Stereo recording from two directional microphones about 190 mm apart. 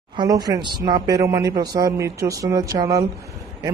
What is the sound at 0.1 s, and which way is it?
Speech, 20° right (ahead or behind).